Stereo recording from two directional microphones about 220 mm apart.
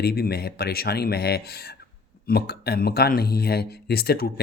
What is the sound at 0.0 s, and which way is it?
Speech, 45° left (ahead or behind).